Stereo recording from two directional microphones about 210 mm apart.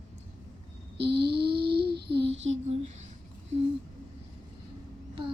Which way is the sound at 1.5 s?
50° right (ahead or behind).